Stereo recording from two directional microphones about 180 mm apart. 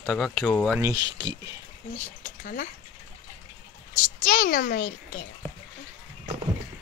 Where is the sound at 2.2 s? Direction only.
50° left (ahead or behind).